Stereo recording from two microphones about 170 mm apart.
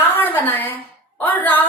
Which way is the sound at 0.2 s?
10° left (ahead or behind).